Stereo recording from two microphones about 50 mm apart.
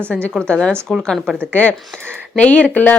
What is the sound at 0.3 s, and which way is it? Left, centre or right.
Speech, centre.